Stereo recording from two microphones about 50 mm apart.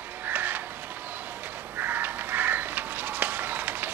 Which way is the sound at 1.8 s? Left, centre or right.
Right.